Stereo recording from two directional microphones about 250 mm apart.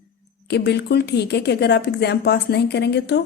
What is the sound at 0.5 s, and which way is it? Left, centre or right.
Speech, left.